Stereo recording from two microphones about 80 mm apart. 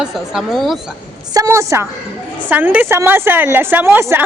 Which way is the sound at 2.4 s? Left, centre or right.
Right.